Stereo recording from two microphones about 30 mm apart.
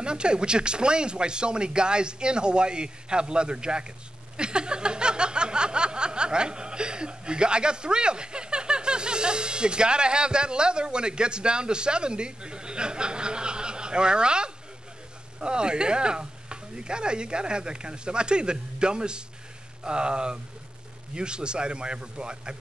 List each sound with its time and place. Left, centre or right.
0.0 s speech: right
4.4 s a sound: right
15.4 s speech: right